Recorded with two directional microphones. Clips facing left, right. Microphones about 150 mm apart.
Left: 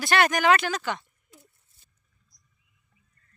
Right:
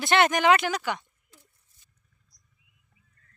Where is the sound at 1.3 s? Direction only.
20° left (ahead or behind).